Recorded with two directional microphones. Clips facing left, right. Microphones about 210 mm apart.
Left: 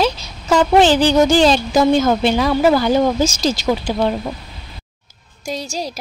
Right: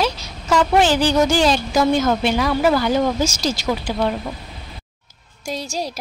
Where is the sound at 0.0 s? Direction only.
25° left (ahead or behind).